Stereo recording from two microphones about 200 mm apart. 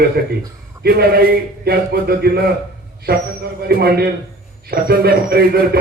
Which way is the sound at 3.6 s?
50° right (ahead or behind).